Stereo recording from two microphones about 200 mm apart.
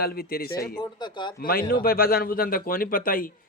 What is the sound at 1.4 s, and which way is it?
A man's voice, 45° left (ahead or behind).